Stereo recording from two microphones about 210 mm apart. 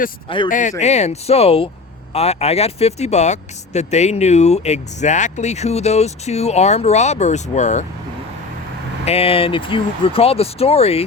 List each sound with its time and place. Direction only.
0.4 s speech: 40° left (ahead or behind)
9.0 s speech: 30° left (ahead or behind)